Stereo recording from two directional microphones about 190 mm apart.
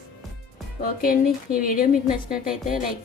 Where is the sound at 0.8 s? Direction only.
50° left (ahead or behind).